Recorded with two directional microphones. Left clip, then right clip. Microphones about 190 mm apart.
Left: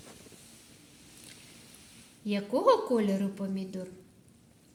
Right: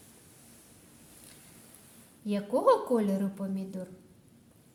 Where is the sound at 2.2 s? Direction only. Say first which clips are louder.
Even; 5° right (ahead or behind).